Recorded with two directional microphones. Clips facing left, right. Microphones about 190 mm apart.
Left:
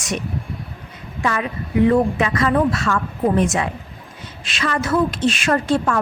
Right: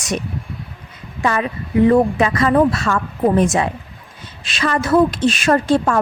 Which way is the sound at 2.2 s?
35° right (ahead or behind).